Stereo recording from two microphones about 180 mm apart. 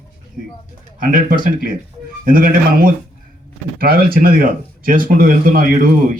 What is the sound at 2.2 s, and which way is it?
Speech, 50° right (ahead or behind).